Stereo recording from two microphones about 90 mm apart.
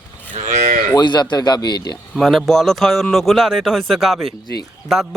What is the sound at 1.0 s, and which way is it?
Speech, 55° left (ahead or behind).